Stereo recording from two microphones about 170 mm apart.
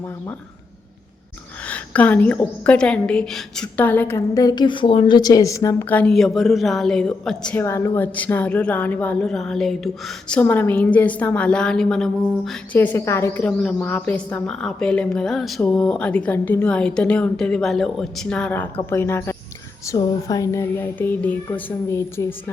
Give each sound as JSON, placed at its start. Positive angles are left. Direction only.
{"t": 1.6, "sound": "a woman's voice", "side_deg": 10}
{"t": 7.6, "sound": "a woman's voice", "side_deg": 15}